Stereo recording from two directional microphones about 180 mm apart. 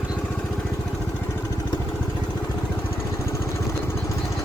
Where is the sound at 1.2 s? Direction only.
10° left (ahead or behind).